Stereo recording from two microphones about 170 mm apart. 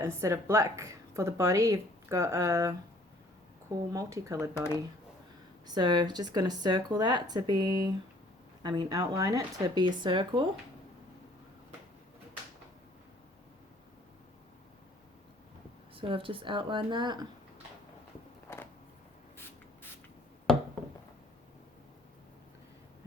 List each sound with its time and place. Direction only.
0.0 s a woman's voice: 15° right (ahead or behind)
3.9 s speech: 20° right (ahead or behind)
4.5 s speech: 15° left (ahead or behind)
5.6 s speech: 25° right (ahead or behind)
16.0 s speech: 30° right (ahead or behind)
18.5 s a sound: 15° left (ahead or behind)